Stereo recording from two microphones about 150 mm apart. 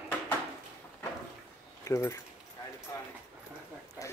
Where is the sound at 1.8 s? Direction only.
20° left (ahead or behind).